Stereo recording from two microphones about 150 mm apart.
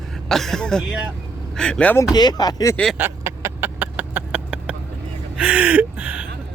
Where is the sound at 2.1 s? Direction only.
25° left (ahead or behind).